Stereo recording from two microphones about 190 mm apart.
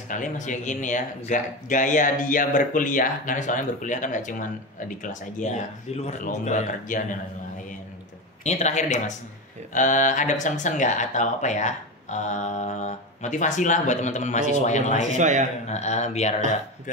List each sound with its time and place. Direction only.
0.1 s speech: 40° left (ahead or behind)
8.5 s speech: 35° left (ahead or behind)
15.1 s speech: 40° right (ahead or behind)
15.7 s speech: 35° left (ahead or behind)